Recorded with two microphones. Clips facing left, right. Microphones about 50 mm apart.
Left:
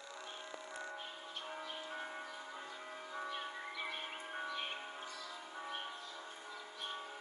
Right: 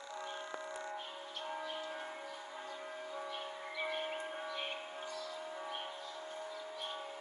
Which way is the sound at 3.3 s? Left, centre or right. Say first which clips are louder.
Right 1 dB; centre.